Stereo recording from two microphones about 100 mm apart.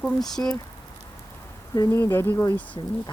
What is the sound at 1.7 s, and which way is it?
Speech, 35° left (ahead or behind).